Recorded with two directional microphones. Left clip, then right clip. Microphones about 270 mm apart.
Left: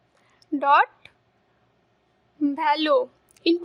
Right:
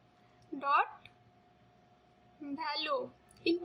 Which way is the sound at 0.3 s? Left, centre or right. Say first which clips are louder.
Left 12 dB; left.